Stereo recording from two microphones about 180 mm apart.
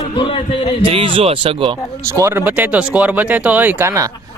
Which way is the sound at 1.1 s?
30° right (ahead or behind).